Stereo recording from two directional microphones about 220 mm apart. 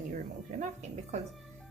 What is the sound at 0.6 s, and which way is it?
Speech, 35° right (ahead or behind).